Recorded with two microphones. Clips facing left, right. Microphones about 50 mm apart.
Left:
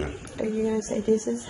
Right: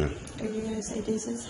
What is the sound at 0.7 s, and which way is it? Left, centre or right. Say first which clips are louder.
Speech: left 7 dB; left.